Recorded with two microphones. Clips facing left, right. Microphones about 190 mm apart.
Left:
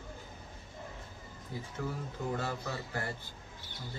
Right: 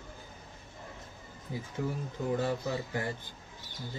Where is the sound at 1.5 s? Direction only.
15° right (ahead or behind).